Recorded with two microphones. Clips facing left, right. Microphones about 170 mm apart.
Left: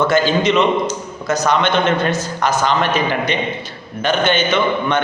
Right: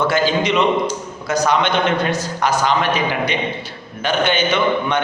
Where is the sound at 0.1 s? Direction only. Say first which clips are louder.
Left 2 dB; 10° right (ahead or behind).